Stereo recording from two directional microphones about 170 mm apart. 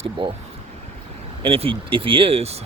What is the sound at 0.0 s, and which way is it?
Speech, 30° right (ahead or behind).